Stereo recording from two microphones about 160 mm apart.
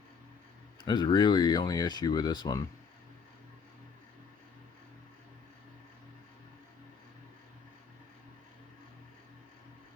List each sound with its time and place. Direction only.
0.9 s speech: 30° left (ahead or behind)